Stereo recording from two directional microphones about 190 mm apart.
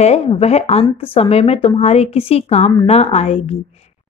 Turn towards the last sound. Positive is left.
turn(degrees=35)  # may be behind; listen again after turning